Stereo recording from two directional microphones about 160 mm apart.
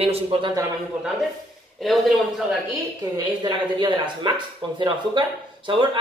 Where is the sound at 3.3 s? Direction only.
30° right (ahead or behind).